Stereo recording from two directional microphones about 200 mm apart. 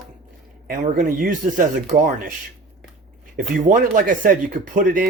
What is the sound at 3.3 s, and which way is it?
Speech, 45° right (ahead or behind).